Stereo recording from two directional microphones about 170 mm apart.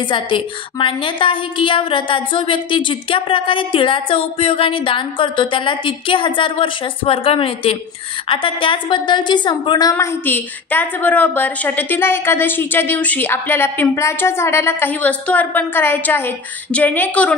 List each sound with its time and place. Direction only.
0.0 s a woman's voice: 30° left (ahead or behind); by 17.4 s 10° left (ahead or behind)